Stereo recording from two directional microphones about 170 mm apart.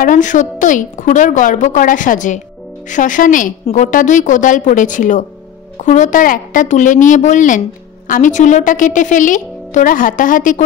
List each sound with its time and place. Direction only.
0.0 s a woman's voice: 50° left (ahead or behind)